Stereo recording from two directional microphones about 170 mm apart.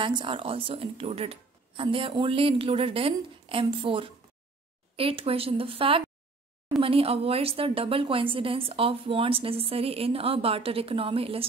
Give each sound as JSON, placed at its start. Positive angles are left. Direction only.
{"t": 0.0, "sound": "a woman's voice", "side_deg": -30}